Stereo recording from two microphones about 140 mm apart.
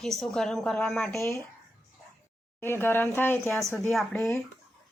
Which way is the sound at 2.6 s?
15° left (ahead or behind).